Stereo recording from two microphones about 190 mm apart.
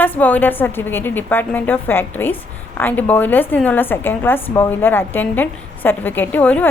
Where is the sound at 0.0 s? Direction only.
10° left (ahead or behind).